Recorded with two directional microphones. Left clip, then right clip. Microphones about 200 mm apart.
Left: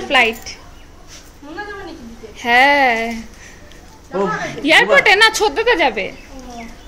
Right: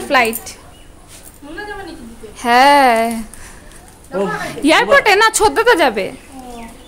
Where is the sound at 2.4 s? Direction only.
30° right (ahead or behind).